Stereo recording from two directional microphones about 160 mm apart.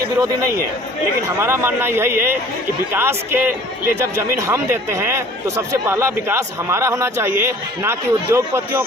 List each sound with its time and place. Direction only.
0.2 s speech: 20° right (ahead or behind)